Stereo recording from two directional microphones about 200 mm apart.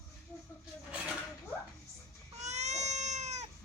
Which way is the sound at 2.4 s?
35° right (ahead or behind).